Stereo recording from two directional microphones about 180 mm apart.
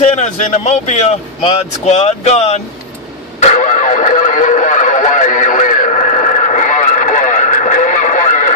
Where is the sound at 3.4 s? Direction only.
45° left (ahead or behind).